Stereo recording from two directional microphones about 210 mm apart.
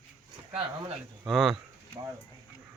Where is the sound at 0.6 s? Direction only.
25° right (ahead or behind).